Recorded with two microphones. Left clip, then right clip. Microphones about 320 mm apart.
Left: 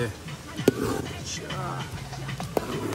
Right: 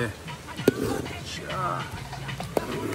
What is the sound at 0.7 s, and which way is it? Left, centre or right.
Speech, centre.